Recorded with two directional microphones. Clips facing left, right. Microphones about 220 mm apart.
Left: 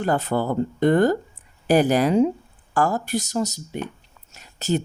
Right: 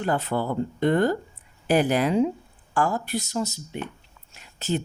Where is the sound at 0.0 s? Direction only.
45° left (ahead or behind).